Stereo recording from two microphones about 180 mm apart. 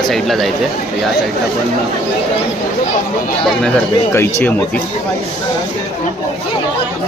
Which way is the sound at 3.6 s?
10° left (ahead or behind).